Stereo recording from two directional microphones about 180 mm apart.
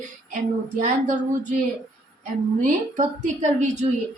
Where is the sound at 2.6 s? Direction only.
40° right (ahead or behind).